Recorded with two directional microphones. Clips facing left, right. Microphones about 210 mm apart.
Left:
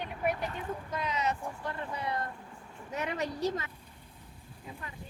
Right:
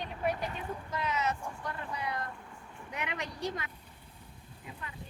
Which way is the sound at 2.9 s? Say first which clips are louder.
Left 4 dB; 35° left (ahead or behind).